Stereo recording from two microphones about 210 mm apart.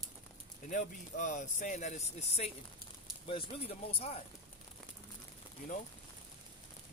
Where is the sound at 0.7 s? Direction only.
35° left (ahead or behind).